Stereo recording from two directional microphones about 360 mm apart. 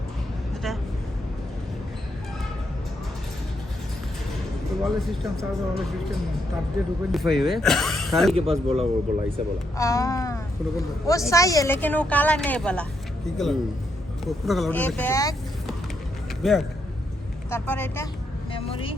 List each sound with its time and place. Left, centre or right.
4.8 s a woman's voice: centre
8.4 s speech: centre
9.7 s a woman's voice: centre